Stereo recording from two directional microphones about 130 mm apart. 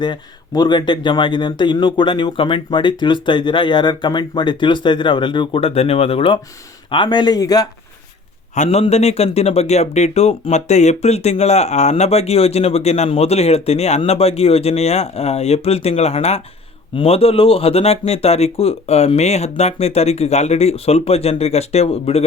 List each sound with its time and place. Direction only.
0.0 s speech: 35° left (ahead or behind)
8.5 s a man's voice: 65° left (ahead or behind)
8.8 s speech: 55° left (ahead or behind)